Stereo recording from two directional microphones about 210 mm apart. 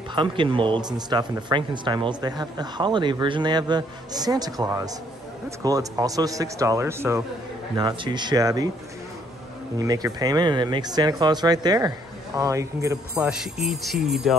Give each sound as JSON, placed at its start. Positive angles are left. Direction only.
{"t": 0.1, "sound": "speech", "side_deg": -25}
{"t": 9.8, "sound": "speech", "side_deg": -15}
{"t": 13.2, "sound": "speech", "side_deg": -5}